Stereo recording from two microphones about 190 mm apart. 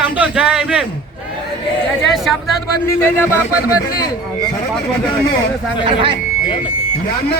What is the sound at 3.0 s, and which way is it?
Speech, 10° left (ahead or behind).